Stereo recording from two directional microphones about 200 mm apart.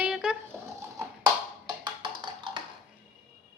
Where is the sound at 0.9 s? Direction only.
20° right (ahead or behind).